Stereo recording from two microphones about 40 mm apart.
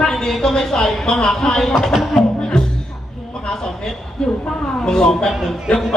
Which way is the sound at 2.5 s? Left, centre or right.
Left.